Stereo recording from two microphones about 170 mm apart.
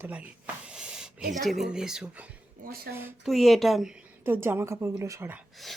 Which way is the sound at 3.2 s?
Centre (ahead or behind).